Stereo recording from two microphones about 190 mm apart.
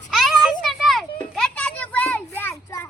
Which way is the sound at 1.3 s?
5° left (ahead or behind).